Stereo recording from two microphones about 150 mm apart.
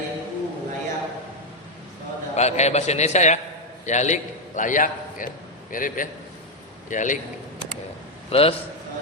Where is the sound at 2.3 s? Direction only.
50° left (ahead or behind).